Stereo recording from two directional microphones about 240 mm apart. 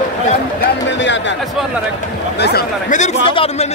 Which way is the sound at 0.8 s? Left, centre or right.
Left.